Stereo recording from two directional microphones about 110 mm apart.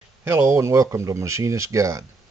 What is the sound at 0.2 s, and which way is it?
Speech, 25° right (ahead or behind).